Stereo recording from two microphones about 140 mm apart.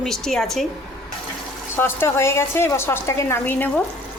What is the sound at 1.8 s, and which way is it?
A woman's voice, 15° left (ahead or behind).